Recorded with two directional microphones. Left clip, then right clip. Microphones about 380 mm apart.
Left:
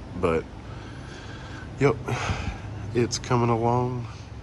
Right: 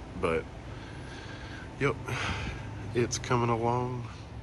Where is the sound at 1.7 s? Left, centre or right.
Centre.